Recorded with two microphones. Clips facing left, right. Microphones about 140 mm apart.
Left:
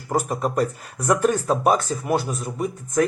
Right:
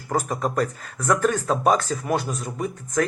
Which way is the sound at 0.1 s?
10° left (ahead or behind).